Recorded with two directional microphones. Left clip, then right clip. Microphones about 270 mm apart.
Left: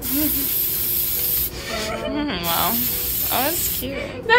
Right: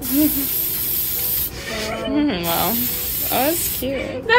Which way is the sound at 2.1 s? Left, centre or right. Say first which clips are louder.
Right 6 dB; centre.